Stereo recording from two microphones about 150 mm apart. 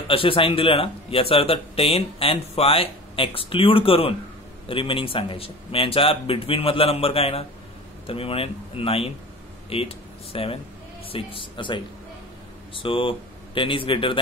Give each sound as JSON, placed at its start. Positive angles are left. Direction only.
{"t": 0.1, "sound": "speech", "side_deg": 35}